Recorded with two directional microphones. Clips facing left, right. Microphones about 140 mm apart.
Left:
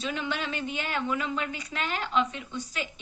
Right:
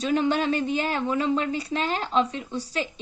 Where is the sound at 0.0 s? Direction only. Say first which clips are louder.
Right 9 dB; 40° right (ahead or behind).